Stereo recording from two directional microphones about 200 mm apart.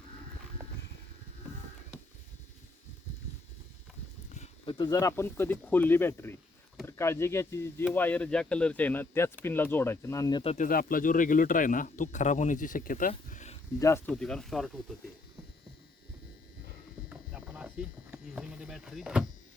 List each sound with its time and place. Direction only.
4.4 s speech: 25° left (ahead or behind)
10.5 s speech: 40° left (ahead or behind)
13.7 s speech: 15° left (ahead or behind)
14.1 s speech: 5° left (ahead or behind)
17.1 s a sound: 5° right (ahead or behind)